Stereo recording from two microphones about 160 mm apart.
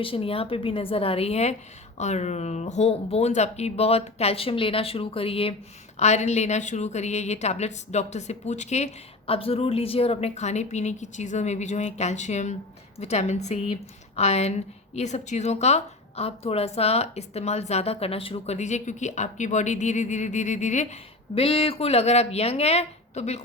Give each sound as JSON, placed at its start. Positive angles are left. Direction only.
{"t": 0.0, "sound": "a woman's voice", "side_deg": 35}